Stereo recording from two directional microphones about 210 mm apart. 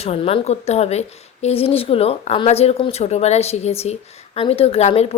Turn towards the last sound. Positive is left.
turn(degrees=30)  # may be behind; listen again after turning